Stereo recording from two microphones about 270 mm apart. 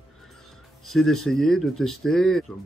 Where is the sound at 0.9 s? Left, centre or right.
Centre.